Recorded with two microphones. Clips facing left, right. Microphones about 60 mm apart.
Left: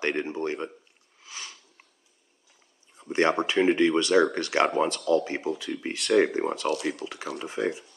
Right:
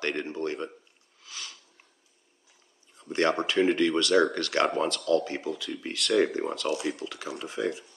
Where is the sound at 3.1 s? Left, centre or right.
Left.